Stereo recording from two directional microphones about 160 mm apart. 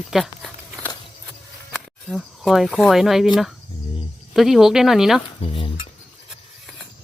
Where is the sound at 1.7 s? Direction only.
5° left (ahead or behind).